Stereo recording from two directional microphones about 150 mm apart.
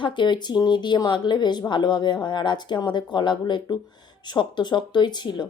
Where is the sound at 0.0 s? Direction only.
30° left (ahead or behind).